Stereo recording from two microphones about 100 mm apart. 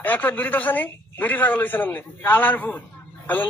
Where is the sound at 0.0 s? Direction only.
20° left (ahead or behind).